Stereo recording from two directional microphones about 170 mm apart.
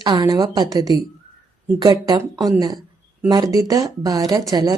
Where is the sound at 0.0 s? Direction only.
20° right (ahead or behind).